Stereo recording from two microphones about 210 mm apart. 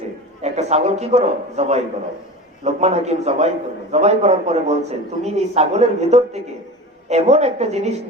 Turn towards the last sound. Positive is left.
turn(degrees=-30)  # may be behind; listen again after turning